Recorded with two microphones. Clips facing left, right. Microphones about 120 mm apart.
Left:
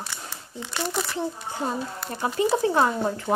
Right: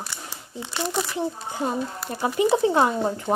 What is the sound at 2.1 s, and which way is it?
Speech, 20° right (ahead or behind).